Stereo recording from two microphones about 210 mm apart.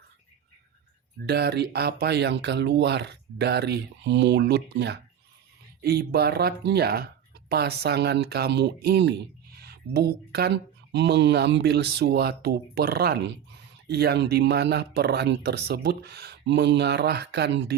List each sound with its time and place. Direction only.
1.3 s speech: 50° right (ahead or behind)